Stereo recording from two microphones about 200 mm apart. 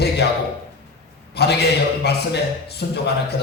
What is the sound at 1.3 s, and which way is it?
A man's voice, 55° left (ahead or behind).